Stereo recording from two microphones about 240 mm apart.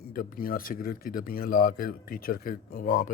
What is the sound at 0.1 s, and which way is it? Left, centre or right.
Speech, left.